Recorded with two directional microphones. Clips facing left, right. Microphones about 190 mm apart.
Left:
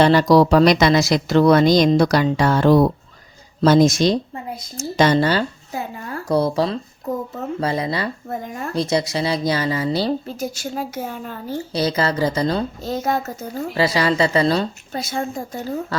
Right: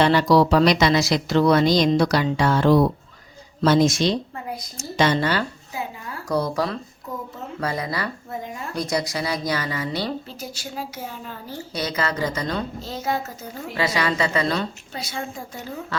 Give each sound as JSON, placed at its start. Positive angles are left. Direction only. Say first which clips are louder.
{"t": 0.0, "sound": "a woman's voice", "louder": "left 3 dB", "side_deg": 40}
{"t": 10.2, "sound": "speech", "louder": "left 8 dB", "side_deg": 45}
{"t": 11.7, "sound": "a woman's voice", "louder": "left 5 dB", "side_deg": 30}
{"t": 12.8, "sound": "speech", "louder": "left 5 dB", "side_deg": 50}
{"t": 13.5, "sound": "a woman's voice", "louder": "left 5 dB", "side_deg": 35}